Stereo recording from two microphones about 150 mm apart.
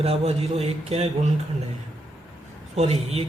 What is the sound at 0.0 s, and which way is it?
A man's voice, 40° right (ahead or behind).